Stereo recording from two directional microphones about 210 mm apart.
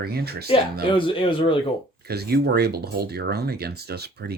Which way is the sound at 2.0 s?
50° right (ahead or behind).